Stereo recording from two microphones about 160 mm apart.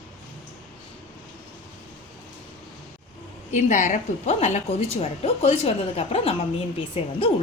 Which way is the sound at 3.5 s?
50° left (ahead or behind).